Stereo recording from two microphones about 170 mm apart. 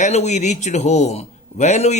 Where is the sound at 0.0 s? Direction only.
40° left (ahead or behind).